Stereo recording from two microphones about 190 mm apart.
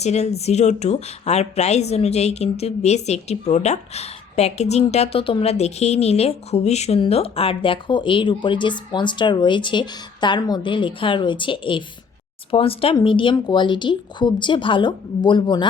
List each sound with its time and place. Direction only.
0.0 s a woman's voice: 35° left (ahead or behind)